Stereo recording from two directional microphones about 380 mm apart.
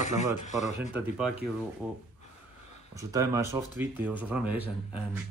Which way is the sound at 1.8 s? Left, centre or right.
Centre.